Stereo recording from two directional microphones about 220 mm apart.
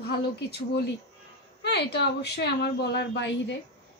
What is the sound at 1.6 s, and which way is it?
Speech, 50° left (ahead or behind).